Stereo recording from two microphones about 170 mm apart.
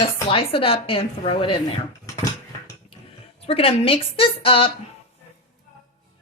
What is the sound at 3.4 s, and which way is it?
Speech, 35° left (ahead or behind).